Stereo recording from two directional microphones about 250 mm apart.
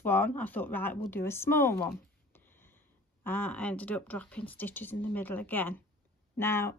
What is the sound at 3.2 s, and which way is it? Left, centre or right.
Speech, centre.